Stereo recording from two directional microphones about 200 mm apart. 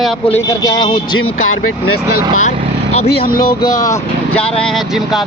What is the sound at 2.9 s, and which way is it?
Speech, 30° left (ahead or behind).